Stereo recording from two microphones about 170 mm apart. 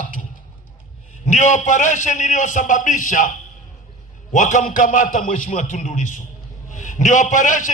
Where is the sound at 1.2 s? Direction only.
45° left (ahead or behind).